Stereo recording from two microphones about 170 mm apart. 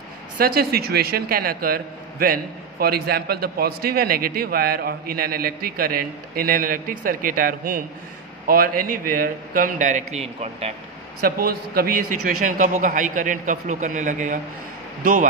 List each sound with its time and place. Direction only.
0.4 s a man's voice: 60° right (ahead or behind); by 10.7 s 40° right (ahead or behind)
11.2 s a man's voice: 60° right (ahead or behind)